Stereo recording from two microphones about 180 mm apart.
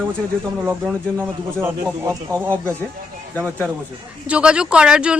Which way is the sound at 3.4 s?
10° left (ahead or behind).